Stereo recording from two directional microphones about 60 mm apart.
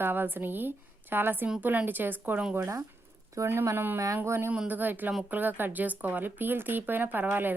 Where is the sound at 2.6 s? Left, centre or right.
Right.